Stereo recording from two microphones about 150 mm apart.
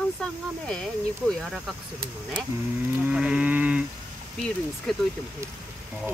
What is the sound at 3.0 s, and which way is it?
Sheep, 5° right (ahead or behind).